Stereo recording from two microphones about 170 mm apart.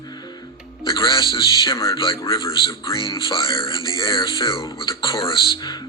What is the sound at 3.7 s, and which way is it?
Music, 20° left (ahead or behind).